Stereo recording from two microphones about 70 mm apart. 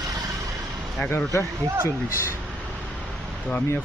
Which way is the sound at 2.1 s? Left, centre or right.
Left.